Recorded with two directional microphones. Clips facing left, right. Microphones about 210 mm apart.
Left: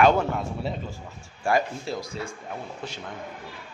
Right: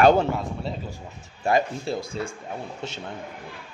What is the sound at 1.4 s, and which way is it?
Speech, 25° right (ahead or behind).